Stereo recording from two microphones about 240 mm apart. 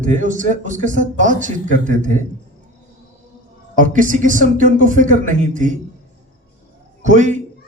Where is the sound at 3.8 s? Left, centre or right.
Right.